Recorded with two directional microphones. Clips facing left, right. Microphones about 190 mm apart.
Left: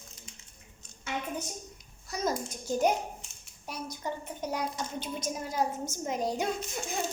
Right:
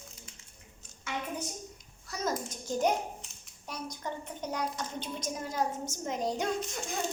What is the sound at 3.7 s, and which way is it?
A woman's voice, 10° left (ahead or behind).